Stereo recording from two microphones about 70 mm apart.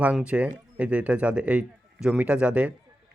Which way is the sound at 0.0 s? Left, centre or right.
Centre.